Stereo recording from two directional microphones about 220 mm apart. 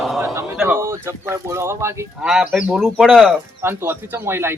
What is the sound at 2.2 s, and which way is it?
Speech, centre (ahead or behind).